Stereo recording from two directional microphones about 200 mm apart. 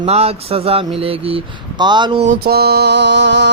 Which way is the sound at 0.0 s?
30° right (ahead or behind).